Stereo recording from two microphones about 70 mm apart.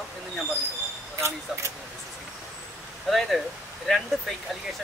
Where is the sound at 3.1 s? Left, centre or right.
Centre.